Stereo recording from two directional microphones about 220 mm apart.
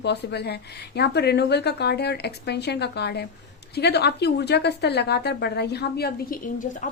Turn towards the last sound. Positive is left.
turn(degrees=35)  # may be behind; listen again after turning